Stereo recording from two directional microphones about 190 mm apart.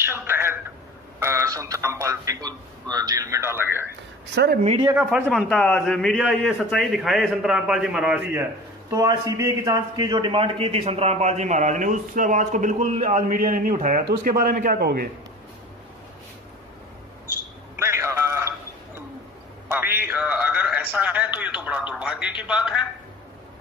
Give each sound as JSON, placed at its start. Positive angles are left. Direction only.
{"t": 0.0, "sound": "a man's voice", "side_deg": -10}
{"t": 4.6, "sound": "speech", "side_deg": -25}
{"t": 4.9, "sound": "a man's voice", "side_deg": 0}
{"t": 17.7, "sound": "a sound", "side_deg": -15}
{"t": 19.7, "sound": "a sound", "side_deg": -10}
{"t": 20.1, "sound": "a man's voice", "side_deg": -5}